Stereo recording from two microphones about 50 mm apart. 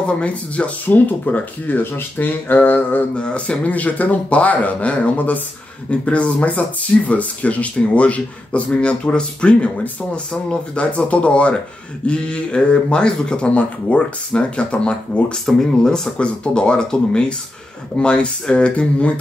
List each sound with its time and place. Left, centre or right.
0.0 s speech: left
0.8 s speech: left
1.8 s speech: left
3.2 s speech: left
15.4 s speech: centre
16.2 s speech: left